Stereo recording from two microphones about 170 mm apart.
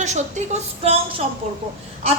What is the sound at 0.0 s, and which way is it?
Speech, 45° right (ahead or behind).